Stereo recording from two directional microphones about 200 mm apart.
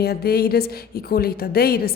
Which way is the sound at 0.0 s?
50° left (ahead or behind).